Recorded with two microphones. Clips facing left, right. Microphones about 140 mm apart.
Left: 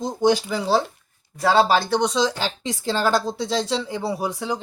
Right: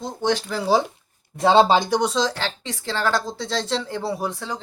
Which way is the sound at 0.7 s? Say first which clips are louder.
Right 2 dB; 15° right (ahead or behind).